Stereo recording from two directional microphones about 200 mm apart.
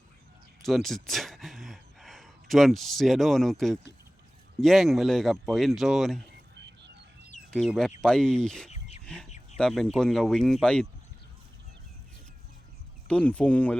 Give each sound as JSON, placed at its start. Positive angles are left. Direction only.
{"t": 0.6, "sound": "speech", "side_deg": 0}
{"t": 6.5, "sound": "a sound", "side_deg": -60}
{"t": 7.5, "sound": "speech", "side_deg": 0}
{"t": 9.0, "sound": "chicken", "side_deg": 5}
{"t": 9.6, "sound": "speech", "side_deg": 5}
{"t": 13.1, "sound": "speech", "side_deg": 5}